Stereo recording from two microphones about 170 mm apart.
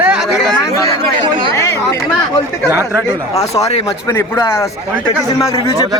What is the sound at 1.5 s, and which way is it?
Chatter, 15° left (ahead or behind).